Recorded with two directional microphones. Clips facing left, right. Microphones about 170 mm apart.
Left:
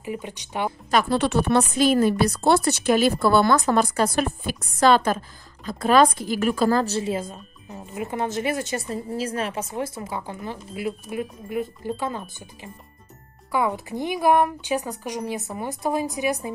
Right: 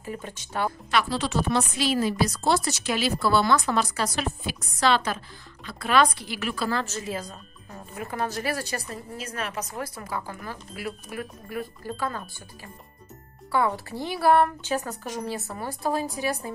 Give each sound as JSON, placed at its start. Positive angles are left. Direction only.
{"t": 0.0, "sound": "a woman's voice", "side_deg": 15}
{"t": 0.8, "sound": "a woman's voice", "side_deg": 50}